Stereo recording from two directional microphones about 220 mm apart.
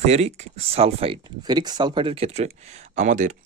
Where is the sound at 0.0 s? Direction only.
30° right (ahead or behind).